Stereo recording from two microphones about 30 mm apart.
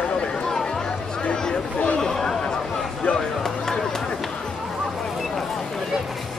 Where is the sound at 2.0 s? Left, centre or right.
Centre.